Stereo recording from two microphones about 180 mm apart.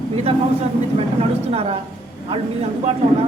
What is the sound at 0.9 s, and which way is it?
Speech, 35° right (ahead or behind).